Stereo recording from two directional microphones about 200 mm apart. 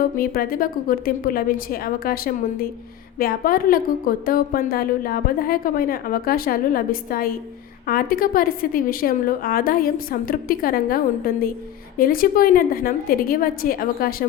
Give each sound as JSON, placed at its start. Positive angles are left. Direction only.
{"t": 0.0, "sound": "a woman's voice", "side_deg": 45}